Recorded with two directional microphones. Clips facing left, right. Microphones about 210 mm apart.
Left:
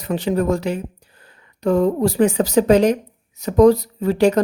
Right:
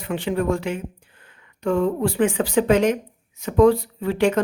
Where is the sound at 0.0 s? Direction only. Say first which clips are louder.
Left 3 dB; 40° left (ahead or behind).